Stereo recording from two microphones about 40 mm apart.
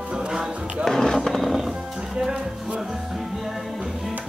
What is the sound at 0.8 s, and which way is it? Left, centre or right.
Skateboard, centre.